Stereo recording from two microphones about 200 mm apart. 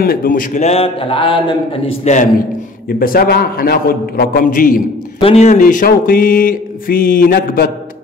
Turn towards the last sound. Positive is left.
turn(degrees=50)  # may be behind; listen again after turning